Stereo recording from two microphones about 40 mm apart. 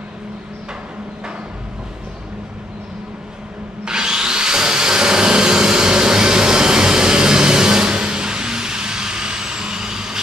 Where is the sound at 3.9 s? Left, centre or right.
Centre.